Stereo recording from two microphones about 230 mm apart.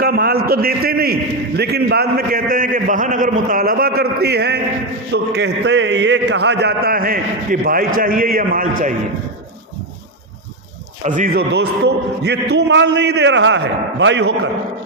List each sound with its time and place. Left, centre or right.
0.0 s a man's voice: right
11.0 s a man's voice: right